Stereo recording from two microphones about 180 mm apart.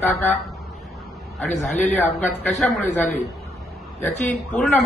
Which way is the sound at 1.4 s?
40° left (ahead or behind).